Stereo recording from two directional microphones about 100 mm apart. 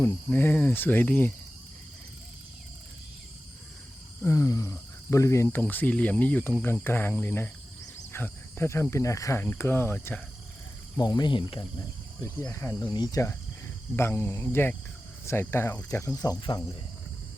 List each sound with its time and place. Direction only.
0.0 s speech: 20° left (ahead or behind)
4.2 s speech: 30° left (ahead or behind)
10.9 s speech: 45° left (ahead or behind)
12.2 s speech: 30° left (ahead or behind)
12.9 s speech: 40° left (ahead or behind)
13.9 s speech: 25° left (ahead or behind); by 16.6 s 45° left (ahead or behind)